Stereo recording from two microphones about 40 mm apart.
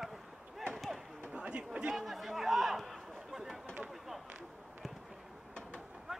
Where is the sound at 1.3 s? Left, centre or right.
Right.